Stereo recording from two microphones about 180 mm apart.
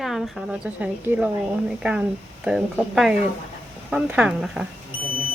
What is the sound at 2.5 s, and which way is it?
Speech, 5° right (ahead or behind).